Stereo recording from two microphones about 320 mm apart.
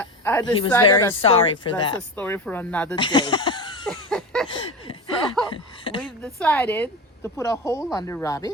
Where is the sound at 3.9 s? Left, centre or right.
Centre.